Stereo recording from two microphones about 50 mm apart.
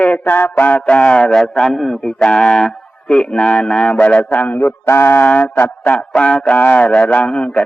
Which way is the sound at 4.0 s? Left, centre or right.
Left.